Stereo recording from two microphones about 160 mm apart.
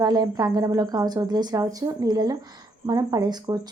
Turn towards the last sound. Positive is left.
turn(degrees=-25)  # may be behind; listen again after turning